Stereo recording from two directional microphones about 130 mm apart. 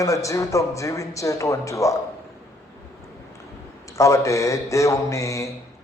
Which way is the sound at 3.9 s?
25° left (ahead or behind).